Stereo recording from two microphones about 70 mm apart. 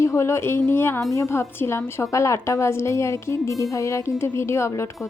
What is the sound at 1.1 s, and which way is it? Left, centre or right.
A woman's voice, left.